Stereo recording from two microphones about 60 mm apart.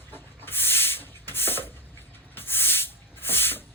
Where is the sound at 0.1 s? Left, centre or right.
Left.